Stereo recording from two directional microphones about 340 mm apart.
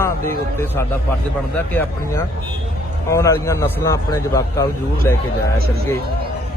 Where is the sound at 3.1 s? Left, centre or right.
Centre.